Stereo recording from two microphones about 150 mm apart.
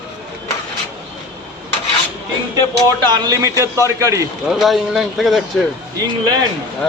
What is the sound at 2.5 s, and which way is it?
A man's voice, 25° right (ahead or behind).